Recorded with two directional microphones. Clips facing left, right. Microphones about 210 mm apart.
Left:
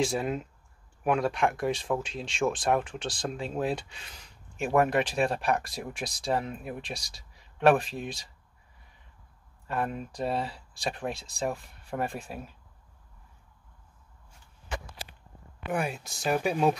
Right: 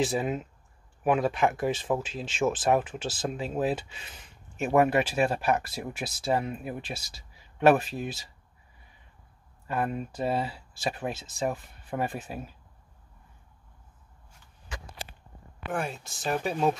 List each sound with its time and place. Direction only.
0.0 s speech: centre (ahead or behind)
9.7 s speech: 5° right (ahead or behind)
15.7 s speech: centre (ahead or behind)